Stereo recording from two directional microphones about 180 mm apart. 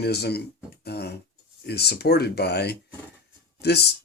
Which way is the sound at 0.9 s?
65° left (ahead or behind).